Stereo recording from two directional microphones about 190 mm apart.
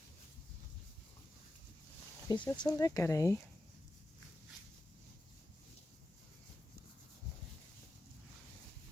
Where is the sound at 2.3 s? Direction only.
20° left (ahead or behind).